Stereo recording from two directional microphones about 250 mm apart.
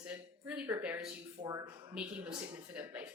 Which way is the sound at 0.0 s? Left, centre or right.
Centre.